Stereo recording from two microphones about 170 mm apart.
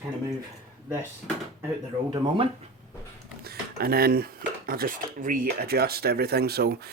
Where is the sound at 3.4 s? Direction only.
65° right (ahead or behind).